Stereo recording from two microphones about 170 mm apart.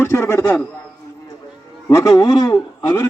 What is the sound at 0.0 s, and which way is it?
Speech, 15° left (ahead or behind).